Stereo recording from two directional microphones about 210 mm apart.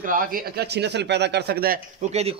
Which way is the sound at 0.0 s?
40° right (ahead or behind).